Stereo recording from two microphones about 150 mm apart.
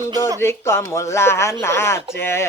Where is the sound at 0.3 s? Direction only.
15° left (ahead or behind).